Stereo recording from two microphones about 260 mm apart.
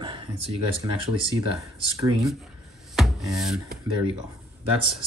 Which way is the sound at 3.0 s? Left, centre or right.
Centre.